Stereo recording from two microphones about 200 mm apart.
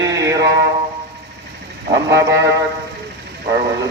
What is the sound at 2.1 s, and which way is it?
Mantra, 15° right (ahead or behind).